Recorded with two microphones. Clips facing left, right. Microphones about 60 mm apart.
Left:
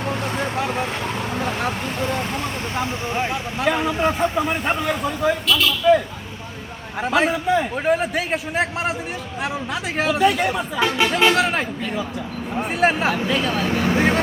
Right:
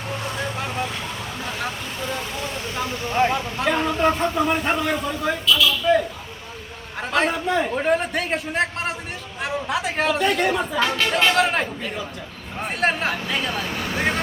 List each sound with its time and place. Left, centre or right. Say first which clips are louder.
2.7 s speech: right 3 dB; left
3.2 s a man's voice: even; centre
5.5 s a man's voice: right 4 dB; left
7.0 s a man's voice: left 2 dB; centre
10.8 s speech: left 2 dB; centre
11.1 s a man's voice: left 1 dB; centre